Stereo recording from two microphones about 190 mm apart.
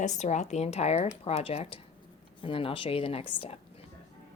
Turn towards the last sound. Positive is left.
turn(degrees=30)  # may be behind; listen again after turning